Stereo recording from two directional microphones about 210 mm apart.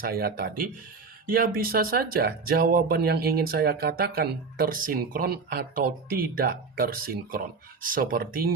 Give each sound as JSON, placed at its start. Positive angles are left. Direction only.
{"t": 0.0, "sound": "speech", "side_deg": -45}